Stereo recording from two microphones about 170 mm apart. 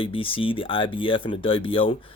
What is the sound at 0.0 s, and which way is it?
Speech, 30° left (ahead or behind).